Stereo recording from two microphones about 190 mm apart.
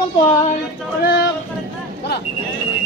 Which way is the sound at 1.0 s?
60° left (ahead or behind).